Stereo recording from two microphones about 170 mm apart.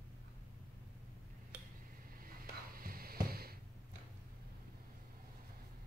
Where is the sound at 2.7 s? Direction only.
60° right (ahead or behind).